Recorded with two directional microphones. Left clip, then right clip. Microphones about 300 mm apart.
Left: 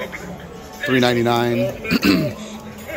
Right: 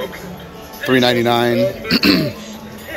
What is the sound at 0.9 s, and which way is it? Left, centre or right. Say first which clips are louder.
Speech: right 3 dB; centre.